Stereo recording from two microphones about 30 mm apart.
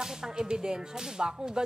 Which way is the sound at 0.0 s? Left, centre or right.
Centre.